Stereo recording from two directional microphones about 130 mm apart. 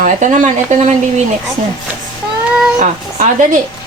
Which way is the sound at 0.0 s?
70° right (ahead or behind).